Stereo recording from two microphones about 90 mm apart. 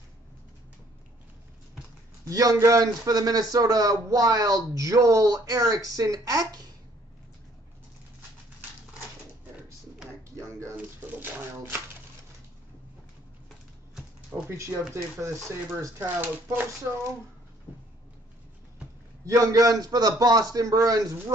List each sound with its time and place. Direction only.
2.2 s a man's voice: 40° right (ahead or behind)
10.3 s a sound: 30° right (ahead or behind)
11.0 s a sound: 20° right (ahead or behind)
14.5 s a man's voice: 30° right (ahead or behind)
15.2 s speech: 20° right (ahead or behind)
19.2 s a man's voice: 40° right (ahead or behind)